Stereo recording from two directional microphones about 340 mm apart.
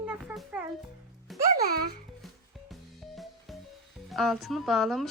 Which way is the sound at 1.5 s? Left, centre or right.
Right.